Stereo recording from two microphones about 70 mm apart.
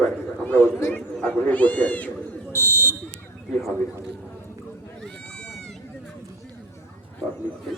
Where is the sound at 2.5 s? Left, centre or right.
Left.